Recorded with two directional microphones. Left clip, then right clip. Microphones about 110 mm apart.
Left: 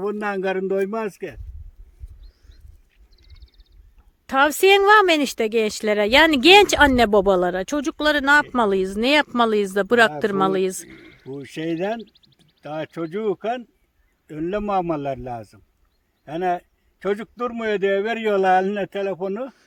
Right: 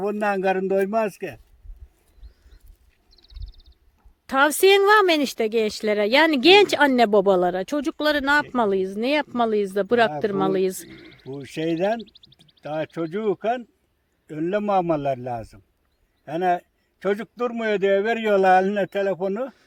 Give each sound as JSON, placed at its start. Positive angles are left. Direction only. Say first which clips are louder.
{"t": 0.0, "sound": "a man's voice", "louder": "right 2 dB", "side_deg": -35}
{"t": 4.3, "sound": "speech", "louder": "left 1 dB", "side_deg": 15}
{"t": 8.5, "sound": "speech", "louder": "left 2 dB", "side_deg": 35}
{"t": 10.5, "sound": "speech", "louder": "even", "side_deg": 15}
{"t": 10.8, "sound": "a sound", "louder": "even", "side_deg": 5}
{"t": 11.4, "sound": "a man's voice", "louder": "right 2 dB", "side_deg": -30}
{"t": 12.6, "sound": "a man's voice", "louder": "right 1 dB", "side_deg": -15}